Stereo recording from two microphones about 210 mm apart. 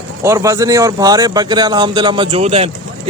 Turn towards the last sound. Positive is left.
turn(degrees=-30)  # may be behind; listen again after turning